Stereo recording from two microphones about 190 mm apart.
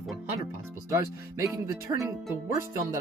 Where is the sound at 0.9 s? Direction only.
15° right (ahead or behind).